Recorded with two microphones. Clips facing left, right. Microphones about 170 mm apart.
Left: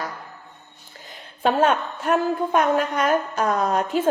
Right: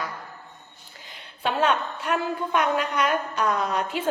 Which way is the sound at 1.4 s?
45° left (ahead or behind).